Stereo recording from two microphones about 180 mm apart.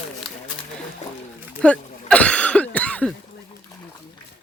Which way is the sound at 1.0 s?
40° left (ahead or behind).